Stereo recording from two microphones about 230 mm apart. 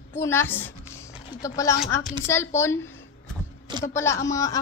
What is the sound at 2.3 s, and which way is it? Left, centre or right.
Speech, centre.